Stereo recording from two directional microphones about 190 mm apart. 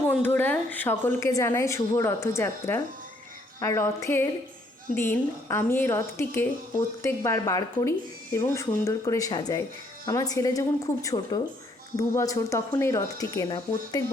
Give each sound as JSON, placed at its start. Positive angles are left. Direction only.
{"t": 0.2, "sound": "a woman's voice", "side_deg": 10}